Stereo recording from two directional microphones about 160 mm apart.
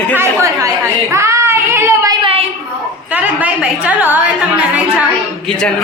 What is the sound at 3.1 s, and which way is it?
A woman's voice, 10° right (ahead or behind).